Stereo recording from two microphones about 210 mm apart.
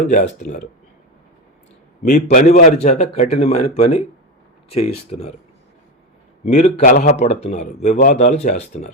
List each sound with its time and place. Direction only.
0.1 s a man's voice: 35° left (ahead or behind)
2.0 s a man's voice: 35° left (ahead or behind)
6.4 s a man's voice: 30° left (ahead or behind)